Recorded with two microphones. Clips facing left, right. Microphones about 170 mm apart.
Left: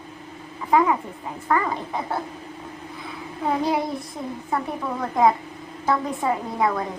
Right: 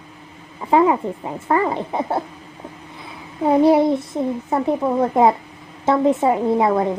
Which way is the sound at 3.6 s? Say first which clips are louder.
Right 10 dB; 25° right (ahead or behind).